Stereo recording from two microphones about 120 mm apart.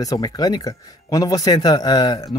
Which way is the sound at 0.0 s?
30° left (ahead or behind).